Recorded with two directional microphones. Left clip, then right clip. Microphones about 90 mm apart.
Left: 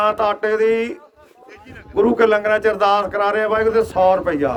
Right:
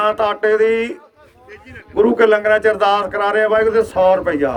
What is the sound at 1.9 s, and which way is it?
A man's voice, 90° left.